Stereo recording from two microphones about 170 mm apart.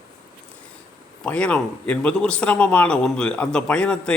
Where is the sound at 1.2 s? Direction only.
5° left (ahead or behind).